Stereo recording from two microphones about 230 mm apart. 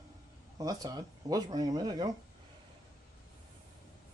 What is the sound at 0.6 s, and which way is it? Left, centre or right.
Speech, centre.